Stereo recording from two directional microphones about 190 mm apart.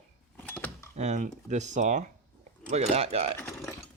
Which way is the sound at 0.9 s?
35° right (ahead or behind).